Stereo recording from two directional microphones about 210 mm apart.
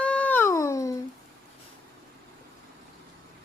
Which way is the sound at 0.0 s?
5° left (ahead or behind).